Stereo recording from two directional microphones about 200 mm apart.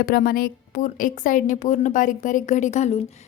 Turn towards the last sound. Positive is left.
turn(degrees=30)  # may be behind; listen again after turning